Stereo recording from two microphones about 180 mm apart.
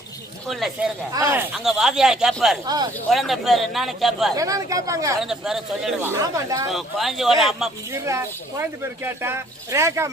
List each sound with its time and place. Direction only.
0.4 s speech: centre (ahead or behind)
1.1 s speech: 15° right (ahead or behind)
2.6 s speech: 20° right (ahead or behind)
3.1 s speech: centre (ahead or behind)
4.4 s speech: 20° right (ahead or behind)
5.2 s speech: centre (ahead or behind)
6.1 s speech: 20° right (ahead or behind)
6.7 s speech: centre (ahead or behind)
7.9 s speech: 15° right (ahead or behind)